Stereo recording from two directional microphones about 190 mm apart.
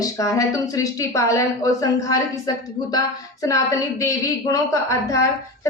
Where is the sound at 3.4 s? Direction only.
15° left (ahead or behind).